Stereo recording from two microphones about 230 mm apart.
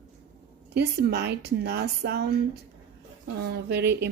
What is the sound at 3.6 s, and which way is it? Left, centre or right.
Speech, right.